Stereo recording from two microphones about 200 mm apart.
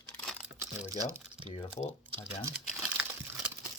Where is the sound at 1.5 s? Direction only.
25° left (ahead or behind).